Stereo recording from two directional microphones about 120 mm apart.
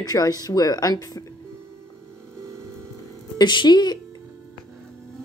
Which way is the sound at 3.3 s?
40° left (ahead or behind).